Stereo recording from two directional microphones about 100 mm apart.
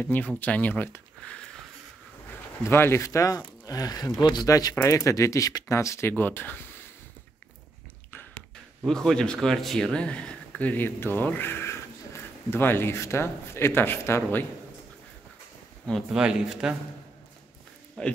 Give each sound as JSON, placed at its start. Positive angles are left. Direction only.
{"t": 0.0, "sound": "speech", "side_deg": 15}
{"t": 1.2, "sound": "wheeze", "side_deg": 10}
{"t": 2.6, "sound": "speech", "side_deg": 25}
{"t": 8.8, "sound": "speech", "side_deg": 5}
{"t": 16.1, "sound": "speech", "side_deg": -10}
{"t": 18.0, "sound": "speech", "side_deg": 10}